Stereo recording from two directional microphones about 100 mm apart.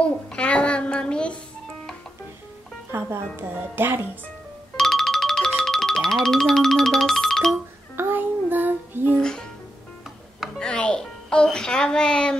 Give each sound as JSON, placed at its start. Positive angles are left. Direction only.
{"t": 0.0, "sound": "a child's voice", "side_deg": 10}
{"t": 2.9, "sound": "speech", "side_deg": -25}
{"t": 4.7, "sound": "music", "side_deg": 5}
{"t": 7.9, "sound": "child singing", "side_deg": -20}
{"t": 9.2, "sound": "music", "side_deg": 5}
{"t": 10.6, "sound": "music", "side_deg": 10}